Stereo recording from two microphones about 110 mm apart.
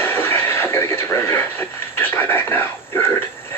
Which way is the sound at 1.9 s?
20° left (ahead or behind).